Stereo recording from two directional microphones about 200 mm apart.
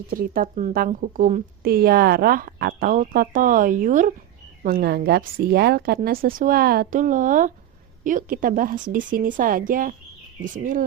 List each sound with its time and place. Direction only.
0.1 s a woman's voice: 45° right (ahead or behind)